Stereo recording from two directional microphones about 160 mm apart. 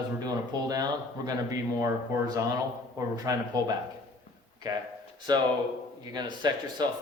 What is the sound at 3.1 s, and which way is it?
Speech, 25° right (ahead or behind).